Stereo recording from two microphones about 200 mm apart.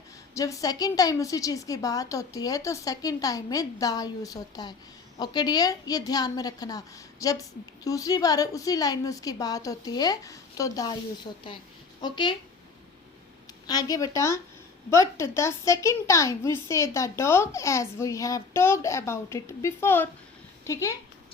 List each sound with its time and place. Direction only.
0.3 s a woman's voice: 15° left (ahead or behind)
13.7 s a woman's voice: 20° left (ahead or behind)